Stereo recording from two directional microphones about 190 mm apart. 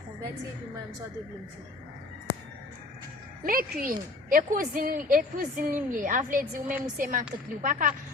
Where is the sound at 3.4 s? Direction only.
45° right (ahead or behind).